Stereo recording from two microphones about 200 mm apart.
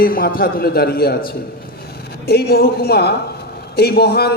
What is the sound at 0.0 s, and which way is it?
A man's voice, 45° left (ahead or behind).